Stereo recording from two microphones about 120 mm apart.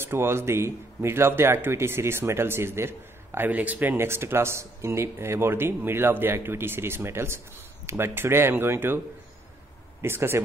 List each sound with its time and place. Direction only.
0.0 s speech: 20° right (ahead or behind)
10.0 s speech: 20° right (ahead or behind)